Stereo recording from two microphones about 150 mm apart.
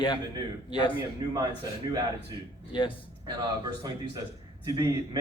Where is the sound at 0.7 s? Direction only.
35° left (ahead or behind).